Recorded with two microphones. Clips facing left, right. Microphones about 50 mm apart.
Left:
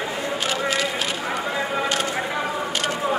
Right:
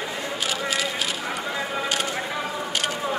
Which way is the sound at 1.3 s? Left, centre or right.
Centre.